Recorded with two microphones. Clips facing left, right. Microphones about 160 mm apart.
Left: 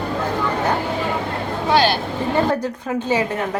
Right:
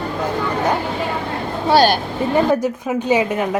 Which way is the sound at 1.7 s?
40° right (ahead or behind).